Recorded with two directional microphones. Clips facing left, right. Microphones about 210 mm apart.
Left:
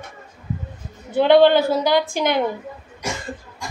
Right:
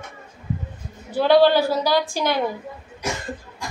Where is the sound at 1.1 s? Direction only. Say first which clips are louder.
Left 2 dB; 20° left (ahead or behind).